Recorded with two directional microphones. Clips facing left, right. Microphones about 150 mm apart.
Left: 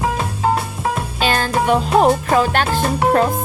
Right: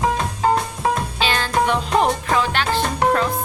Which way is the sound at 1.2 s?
45° left (ahead or behind).